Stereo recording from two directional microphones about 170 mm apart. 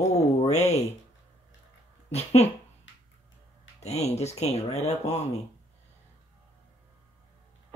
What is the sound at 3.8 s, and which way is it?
Speech, 40° left (ahead or behind).